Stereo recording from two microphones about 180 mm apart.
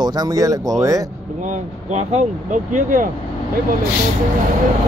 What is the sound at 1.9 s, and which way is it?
Speech, 40° right (ahead or behind).